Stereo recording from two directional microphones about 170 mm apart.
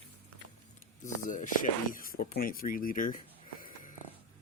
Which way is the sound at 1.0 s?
50° left (ahead or behind).